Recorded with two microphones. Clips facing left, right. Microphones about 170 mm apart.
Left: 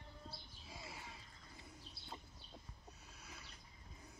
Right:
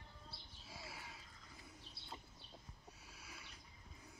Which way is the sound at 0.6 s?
5° right (ahead or behind).